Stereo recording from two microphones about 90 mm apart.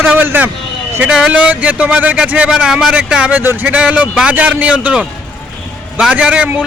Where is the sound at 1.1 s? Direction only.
10° right (ahead or behind).